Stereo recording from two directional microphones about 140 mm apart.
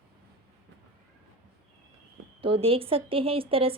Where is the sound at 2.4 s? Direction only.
40° right (ahead or behind).